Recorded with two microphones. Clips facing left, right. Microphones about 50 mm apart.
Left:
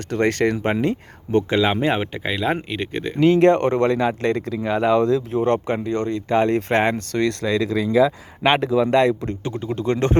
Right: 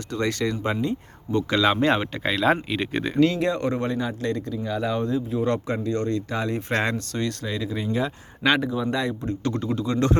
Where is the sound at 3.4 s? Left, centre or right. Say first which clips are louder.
Left 9 dB; left.